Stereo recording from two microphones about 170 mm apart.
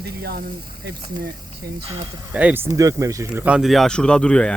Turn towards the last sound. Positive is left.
turn(degrees=5)  # may be behind; listen again after turning